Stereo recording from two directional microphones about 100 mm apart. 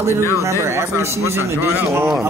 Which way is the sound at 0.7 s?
25° right (ahead or behind).